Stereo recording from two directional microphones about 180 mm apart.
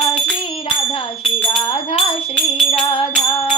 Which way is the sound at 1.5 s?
30° left (ahead or behind).